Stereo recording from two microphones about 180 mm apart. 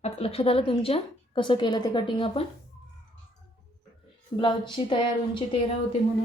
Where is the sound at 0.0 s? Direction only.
30° left (ahead or behind).